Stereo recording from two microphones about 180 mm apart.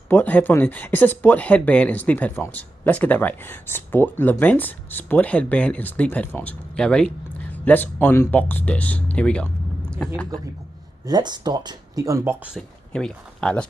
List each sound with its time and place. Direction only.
0.1 s speech: 10° left (ahead or behind)
11.1 s speech: 20° right (ahead or behind)
12.5 s speech: 5° left (ahead or behind)